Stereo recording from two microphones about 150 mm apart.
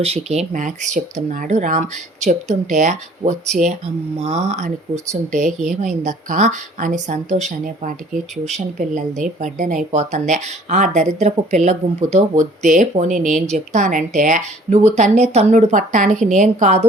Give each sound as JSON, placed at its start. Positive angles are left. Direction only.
{"t": 0.0, "sound": "a woman's voice", "side_deg": -45}
{"t": 9.9, "sound": "speech", "side_deg": -50}